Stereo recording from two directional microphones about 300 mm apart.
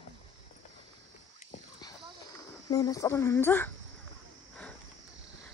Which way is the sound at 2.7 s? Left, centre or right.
Centre.